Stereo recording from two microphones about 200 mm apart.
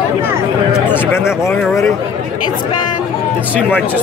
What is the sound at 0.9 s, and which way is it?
Speech, 10° left (ahead or behind).